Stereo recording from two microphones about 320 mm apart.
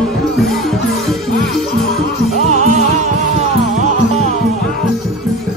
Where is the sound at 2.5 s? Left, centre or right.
Right.